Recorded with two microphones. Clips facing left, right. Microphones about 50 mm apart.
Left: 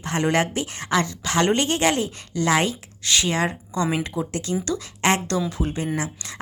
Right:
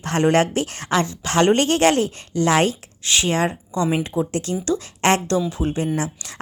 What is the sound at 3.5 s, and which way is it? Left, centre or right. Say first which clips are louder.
Speech: right 3 dB; centre.